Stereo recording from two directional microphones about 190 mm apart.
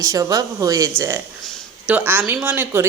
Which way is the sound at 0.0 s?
15° right (ahead or behind).